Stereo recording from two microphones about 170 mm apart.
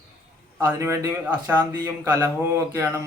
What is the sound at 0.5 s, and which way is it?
Speech, 15° right (ahead or behind).